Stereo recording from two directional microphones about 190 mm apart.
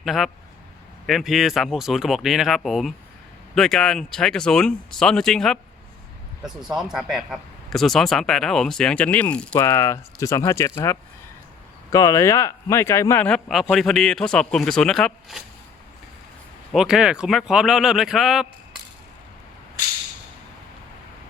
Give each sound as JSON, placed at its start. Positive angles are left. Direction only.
{"t": 0.0, "sound": "a man's voice", "side_deg": 0}
{"t": 11.9, "sound": "a man's voice", "side_deg": 15}
{"t": 16.7, "sound": "a man's voice", "side_deg": -5}